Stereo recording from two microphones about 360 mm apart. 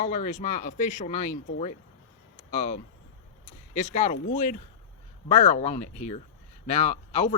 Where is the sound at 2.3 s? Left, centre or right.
Centre.